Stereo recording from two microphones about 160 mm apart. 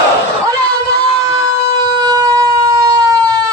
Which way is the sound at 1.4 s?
25° right (ahead or behind).